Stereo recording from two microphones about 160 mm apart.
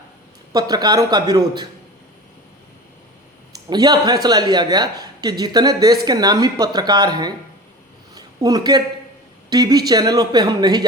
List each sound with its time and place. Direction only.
0.5 s a woman's voice: 25° right (ahead or behind)
3.7 s a woman's voice: 25° right (ahead or behind)
8.1 s a sound: 25° right (ahead or behind)
9.5 s a woman's voice: 25° right (ahead or behind)